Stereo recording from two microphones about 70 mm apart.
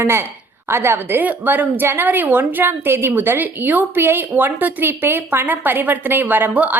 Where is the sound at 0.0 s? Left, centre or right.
Right.